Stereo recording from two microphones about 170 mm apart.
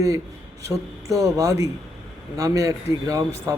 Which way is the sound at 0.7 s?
20° right (ahead or behind).